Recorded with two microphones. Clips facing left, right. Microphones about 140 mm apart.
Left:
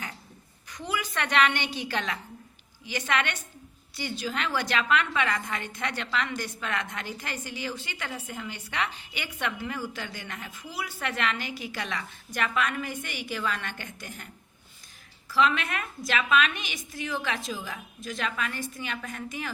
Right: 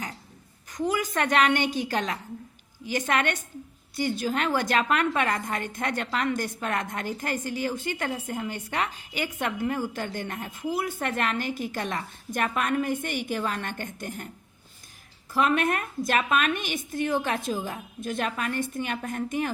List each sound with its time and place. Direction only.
0.7 s a woman's voice: 45° right (ahead or behind)
15.3 s a woman's voice: 50° right (ahead or behind)